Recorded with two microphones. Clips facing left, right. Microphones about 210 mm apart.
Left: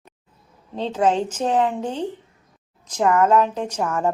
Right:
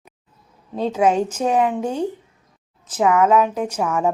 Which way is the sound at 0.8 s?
10° right (ahead or behind).